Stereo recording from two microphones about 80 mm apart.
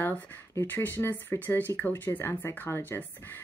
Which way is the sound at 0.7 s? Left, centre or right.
Left.